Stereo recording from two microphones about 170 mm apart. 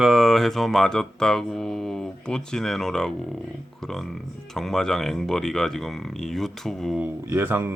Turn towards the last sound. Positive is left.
turn(degrees=-10)  # may be behind; listen again after turning